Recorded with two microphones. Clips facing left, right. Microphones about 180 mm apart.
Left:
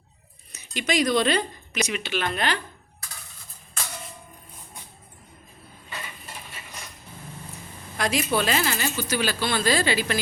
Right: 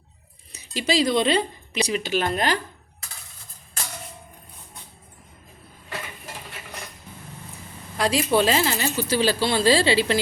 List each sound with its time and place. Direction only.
0.5 s speech: 35° right (ahead or behind)
7.9 s a woman's voice: 30° right (ahead or behind)